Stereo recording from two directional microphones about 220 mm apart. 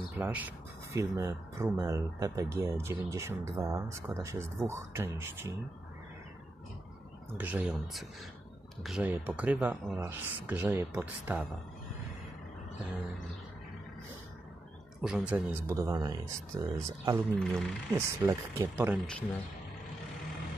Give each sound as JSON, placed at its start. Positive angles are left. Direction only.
{"t": 0.2, "sound": "speech", "side_deg": -5}
{"t": 7.3, "sound": "speech", "side_deg": -5}
{"t": 15.0, "sound": "speech", "side_deg": 0}
{"t": 17.4, "sound": "speech", "side_deg": 5}
{"t": 17.9, "sound": "speech", "side_deg": -10}